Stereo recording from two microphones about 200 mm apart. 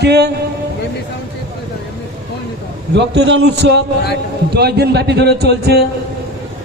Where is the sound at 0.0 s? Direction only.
55° right (ahead or behind).